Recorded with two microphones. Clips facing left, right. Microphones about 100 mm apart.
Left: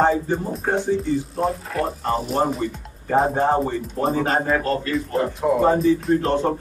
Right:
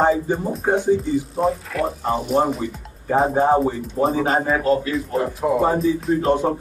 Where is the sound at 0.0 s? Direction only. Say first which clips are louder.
Right 1 dB; 10° right (ahead or behind).